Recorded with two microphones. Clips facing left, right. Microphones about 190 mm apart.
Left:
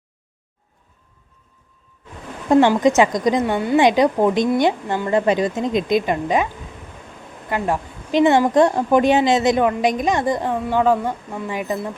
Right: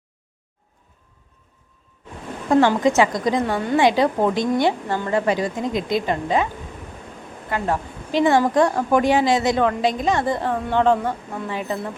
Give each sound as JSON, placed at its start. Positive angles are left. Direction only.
{"t": 2.5, "sound": "a woman's voice", "side_deg": 20}
{"t": 7.5, "sound": "a woman's voice", "side_deg": 20}